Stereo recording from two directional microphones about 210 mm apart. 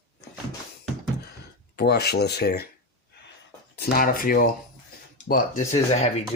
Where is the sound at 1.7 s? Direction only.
50° left (ahead or behind).